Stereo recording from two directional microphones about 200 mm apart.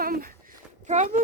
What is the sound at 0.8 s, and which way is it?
Speech, 35° right (ahead or behind).